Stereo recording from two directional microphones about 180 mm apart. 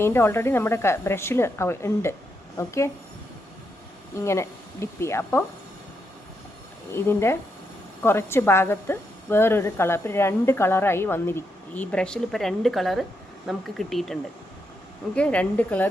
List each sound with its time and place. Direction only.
0.0 s a woman's voice: 15° left (ahead or behind)
4.2 s a woman's voice: 15° left (ahead or behind)
6.9 s a woman's voice: 15° left (ahead or behind)